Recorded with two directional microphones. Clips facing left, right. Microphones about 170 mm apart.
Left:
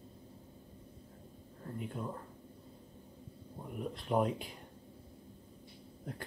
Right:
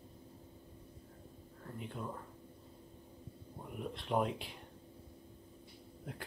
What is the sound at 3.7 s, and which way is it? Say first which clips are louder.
Speech: left 2 dB; centre (ahead or behind).